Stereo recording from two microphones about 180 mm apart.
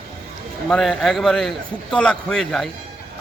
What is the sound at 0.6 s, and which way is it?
A man's voice, centre (ahead or behind).